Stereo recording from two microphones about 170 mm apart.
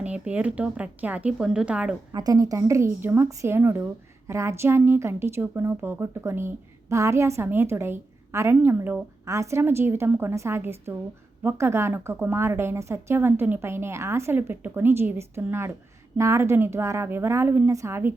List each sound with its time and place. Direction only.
0.0 s a woman's voice: 10° right (ahead or behind)
2.1 s a woman's voice: 20° right (ahead or behind)